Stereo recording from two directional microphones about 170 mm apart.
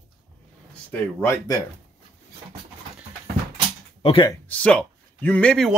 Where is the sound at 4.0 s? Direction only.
35° left (ahead or behind).